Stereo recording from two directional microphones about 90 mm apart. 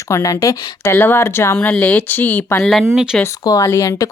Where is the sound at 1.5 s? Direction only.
15° left (ahead or behind).